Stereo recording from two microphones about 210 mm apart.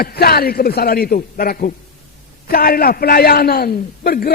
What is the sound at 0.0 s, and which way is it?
A man's voice, 45° left (ahead or behind).